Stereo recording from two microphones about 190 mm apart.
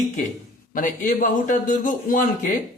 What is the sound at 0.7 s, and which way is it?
A man's voice, 45° left (ahead or behind).